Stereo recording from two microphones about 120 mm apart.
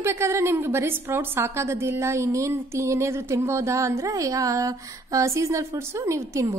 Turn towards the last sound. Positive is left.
turn(degrees=-25)  # may be behind; listen again after turning